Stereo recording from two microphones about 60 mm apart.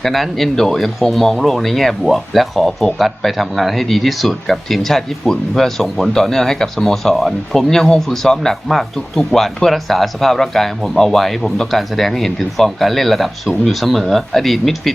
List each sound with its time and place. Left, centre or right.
0.0 s speech: centre